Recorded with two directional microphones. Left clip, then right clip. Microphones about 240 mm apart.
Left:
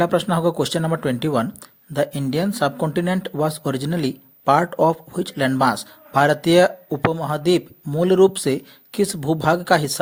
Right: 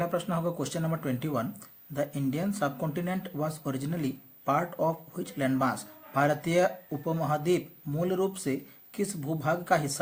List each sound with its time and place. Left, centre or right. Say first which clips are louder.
0.0 s speech: left 12 dB; left